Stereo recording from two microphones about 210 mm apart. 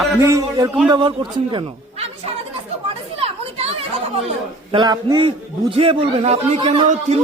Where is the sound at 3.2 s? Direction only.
30° right (ahead or behind).